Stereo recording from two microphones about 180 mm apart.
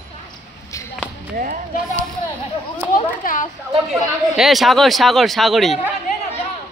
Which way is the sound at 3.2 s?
50° left (ahead or behind).